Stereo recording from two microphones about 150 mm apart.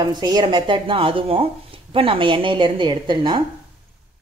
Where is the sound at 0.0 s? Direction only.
25° right (ahead or behind).